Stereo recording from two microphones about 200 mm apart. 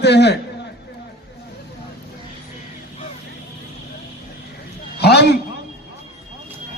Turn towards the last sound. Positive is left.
turn(degrees=55)  # may be behind; listen again after turning